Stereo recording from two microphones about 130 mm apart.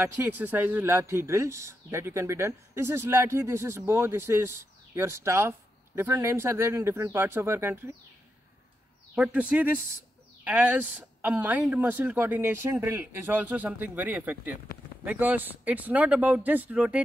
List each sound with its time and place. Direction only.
0.0 s a man's voice: 15° right (ahead or behind)
9.1 s speech: 10° right (ahead or behind)